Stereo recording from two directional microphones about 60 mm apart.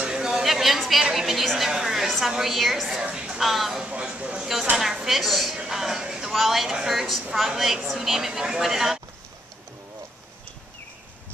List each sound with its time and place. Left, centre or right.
0.0 s a sound: centre
1.1 s a woman's voice: centre
3.1 s music: centre
3.3 s a woman's voice: centre
3.8 s a sound: centre
4.7 s a woman's voice: centre
5.6 s music: centre
6.3 s a woman's voice: centre